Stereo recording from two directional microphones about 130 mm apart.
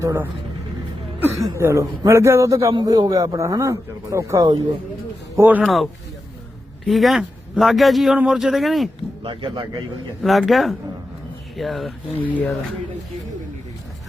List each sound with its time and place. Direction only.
0.0 s a man's voice: 25° right (ahead or behind)
1.5 s a man's voice: 20° right (ahead or behind)
5.4 s speech: 15° right (ahead or behind)
5.6 s a man's voice: centre (ahead or behind)
9.2 s speech: 40° right (ahead or behind)
10.2 s a man's voice: centre (ahead or behind)
12.2 s speech: 10° left (ahead or behind)